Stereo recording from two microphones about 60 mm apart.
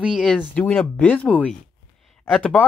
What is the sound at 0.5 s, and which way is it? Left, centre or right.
Speech, centre.